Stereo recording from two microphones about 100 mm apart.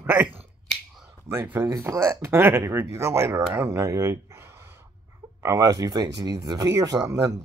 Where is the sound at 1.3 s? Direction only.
25° right (ahead or behind).